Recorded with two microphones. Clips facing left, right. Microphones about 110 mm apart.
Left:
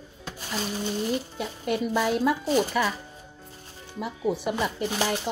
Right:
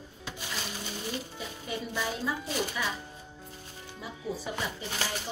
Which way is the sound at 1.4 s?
65° left (ahead or behind).